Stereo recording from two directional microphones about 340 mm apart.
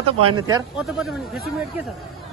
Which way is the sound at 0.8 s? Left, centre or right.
Centre.